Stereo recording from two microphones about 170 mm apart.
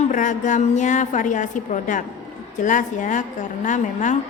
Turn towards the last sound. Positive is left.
turn(degrees=45)  # may be behind; listen again after turning